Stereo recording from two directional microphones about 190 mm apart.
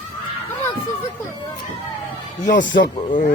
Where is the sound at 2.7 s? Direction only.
75° left (ahead or behind).